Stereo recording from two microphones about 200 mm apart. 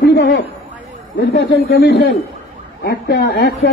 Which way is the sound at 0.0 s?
60° left (ahead or behind).